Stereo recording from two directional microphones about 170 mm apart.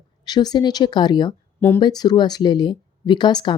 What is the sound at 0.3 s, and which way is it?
Speech, 25° left (ahead or behind).